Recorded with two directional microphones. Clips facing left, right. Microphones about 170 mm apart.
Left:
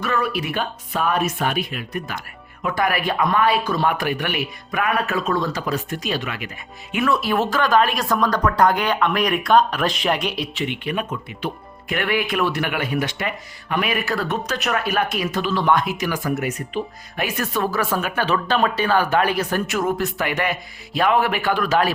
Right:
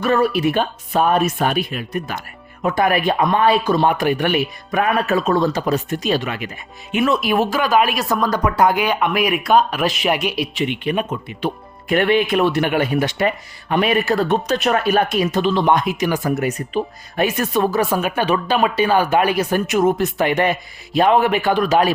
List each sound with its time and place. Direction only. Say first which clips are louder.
0.0 s speech: right 7 dB; 30° right (ahead or behind)
6.9 s speech: right 3 dB; 20° right (ahead or behind)